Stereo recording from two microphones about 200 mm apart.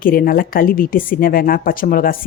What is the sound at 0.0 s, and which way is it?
A woman's voice, 45° left (ahead or behind).